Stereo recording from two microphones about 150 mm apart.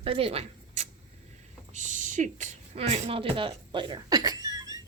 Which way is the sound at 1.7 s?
55° right (ahead or behind).